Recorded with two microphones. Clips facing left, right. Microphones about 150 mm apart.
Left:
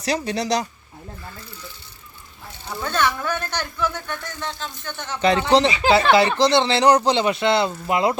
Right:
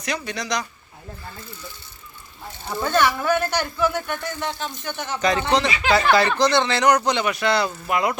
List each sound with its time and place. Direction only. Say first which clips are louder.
0.0 s speech: left 5 dB; 35° left (ahead or behind)
2.8 s speech: right 3 dB; 10° right (ahead or behind)
5.2 s speech: left 4 dB; 30° left (ahead or behind)